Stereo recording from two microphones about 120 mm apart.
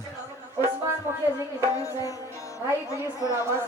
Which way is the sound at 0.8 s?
25° right (ahead or behind).